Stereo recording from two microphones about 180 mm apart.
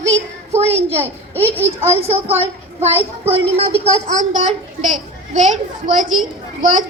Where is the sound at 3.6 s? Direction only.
40° right (ahead or behind).